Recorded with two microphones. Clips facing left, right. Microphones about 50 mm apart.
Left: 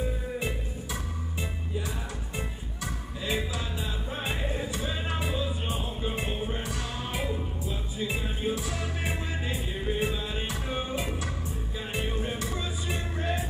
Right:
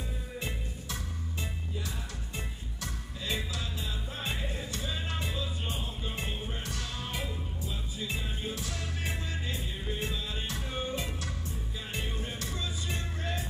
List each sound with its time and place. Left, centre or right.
0.4 s music: centre
2.3 s music: centre